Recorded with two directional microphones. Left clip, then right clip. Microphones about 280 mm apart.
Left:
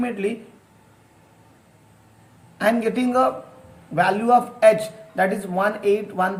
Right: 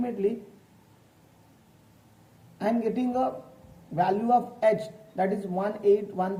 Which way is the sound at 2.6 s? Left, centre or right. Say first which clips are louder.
Left 7 dB; centre.